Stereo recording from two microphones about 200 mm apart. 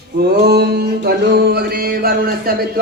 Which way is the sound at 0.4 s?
55° right (ahead or behind).